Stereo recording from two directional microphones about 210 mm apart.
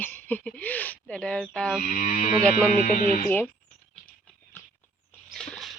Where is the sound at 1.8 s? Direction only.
40° left (ahead or behind).